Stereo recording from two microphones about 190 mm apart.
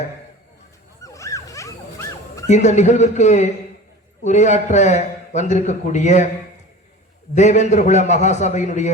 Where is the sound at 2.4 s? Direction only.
35° left (ahead or behind).